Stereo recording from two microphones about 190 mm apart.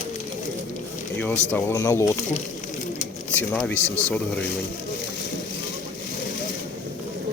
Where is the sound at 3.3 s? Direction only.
10° left (ahead or behind).